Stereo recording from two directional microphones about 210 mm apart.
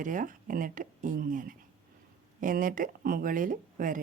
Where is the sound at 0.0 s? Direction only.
40° right (ahead or behind).